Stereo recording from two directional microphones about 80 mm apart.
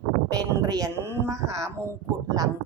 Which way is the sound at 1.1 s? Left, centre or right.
Right.